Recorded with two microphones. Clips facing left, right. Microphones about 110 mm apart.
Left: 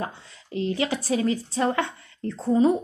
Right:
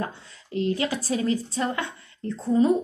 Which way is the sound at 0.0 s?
20° left (ahead or behind).